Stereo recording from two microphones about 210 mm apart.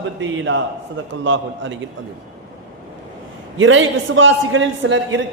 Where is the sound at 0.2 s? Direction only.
65° right (ahead or behind).